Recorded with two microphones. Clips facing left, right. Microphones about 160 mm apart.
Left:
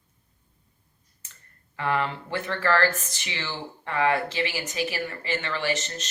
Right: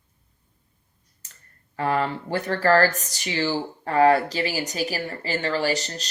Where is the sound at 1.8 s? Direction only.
35° right (ahead or behind).